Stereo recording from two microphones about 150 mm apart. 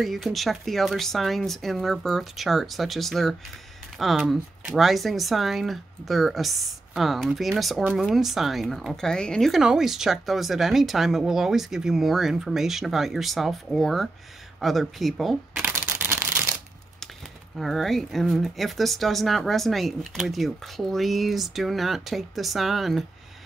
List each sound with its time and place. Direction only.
0.0 s speech: centre (ahead or behind)
15.6 s camera: 15° right (ahead or behind)
17.6 s speech: centre (ahead or behind)